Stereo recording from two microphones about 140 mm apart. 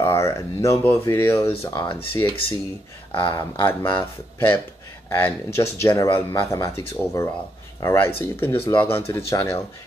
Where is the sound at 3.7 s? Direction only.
15° left (ahead or behind).